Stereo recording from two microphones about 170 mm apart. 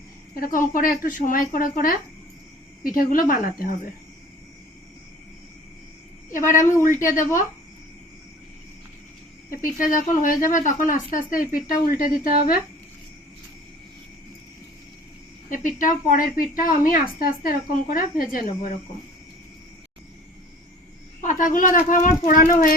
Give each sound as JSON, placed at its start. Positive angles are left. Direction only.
{"t": 0.3, "sound": "a woman's voice", "side_deg": 55}
{"t": 6.5, "sound": "a woman's voice", "side_deg": 50}
{"t": 9.5, "sound": "a woman's voice", "side_deg": 55}
{"t": 15.4, "sound": "a woman's voice", "side_deg": 50}
{"t": 21.2, "sound": "a woman's voice", "side_deg": 50}